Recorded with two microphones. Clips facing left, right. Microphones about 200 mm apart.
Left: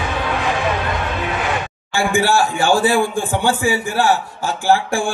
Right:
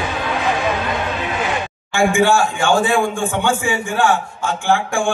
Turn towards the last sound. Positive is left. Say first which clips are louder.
# left 1 dB
turn(degrees=35)  # may be behind; listen again after turning